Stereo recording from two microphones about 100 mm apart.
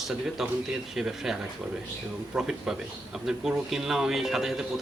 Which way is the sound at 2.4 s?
5° right (ahead or behind).